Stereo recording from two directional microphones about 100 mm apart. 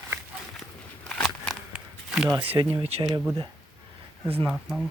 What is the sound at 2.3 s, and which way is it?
Speech, 65° right (ahead or behind).